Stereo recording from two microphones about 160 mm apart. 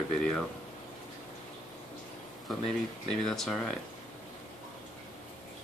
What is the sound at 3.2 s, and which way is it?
Speech, centre (ahead or behind).